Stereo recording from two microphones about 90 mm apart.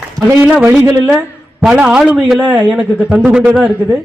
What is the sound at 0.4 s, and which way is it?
A man's voice, 20° right (ahead or behind).